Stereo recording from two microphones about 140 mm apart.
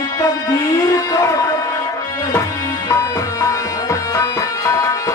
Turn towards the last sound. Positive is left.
turn(degrees=20)  # may be behind; listen again after turning